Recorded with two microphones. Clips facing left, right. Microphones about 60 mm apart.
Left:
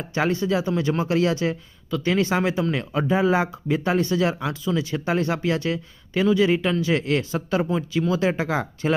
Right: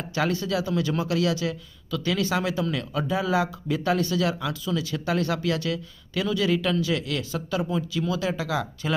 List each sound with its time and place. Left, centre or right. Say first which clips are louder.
0.0 s speech: left 3 dB; left